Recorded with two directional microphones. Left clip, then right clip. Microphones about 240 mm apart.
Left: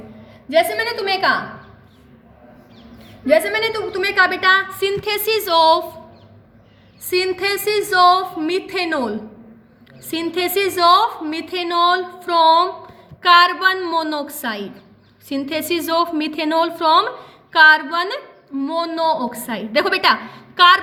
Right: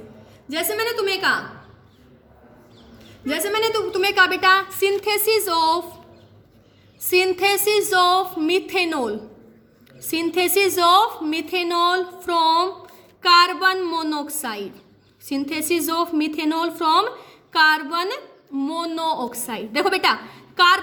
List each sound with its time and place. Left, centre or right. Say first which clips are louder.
0.5 s a woman's voice: left 6 dB; centre
3.2 s a woman's voice: left 6 dB; centre
7.1 s a woman's voice: right 1 dB; centre
10.3 s a woman's voice: even; centre